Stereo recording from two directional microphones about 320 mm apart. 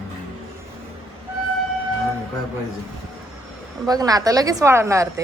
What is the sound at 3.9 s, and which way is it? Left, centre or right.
A woman's voice, centre.